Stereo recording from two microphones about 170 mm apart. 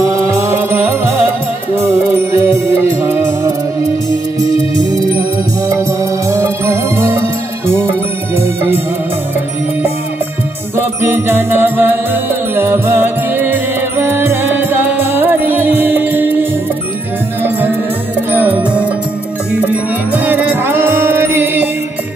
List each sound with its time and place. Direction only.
0.1 s music: 15° right (ahead or behind)
1.8 s music: 15° right (ahead or behind)
6.3 s music: 15° right (ahead or behind)
8.4 s music: 10° right (ahead or behind)
10.8 s music: 10° right (ahead or behind)
17.4 s music: 10° right (ahead or behind)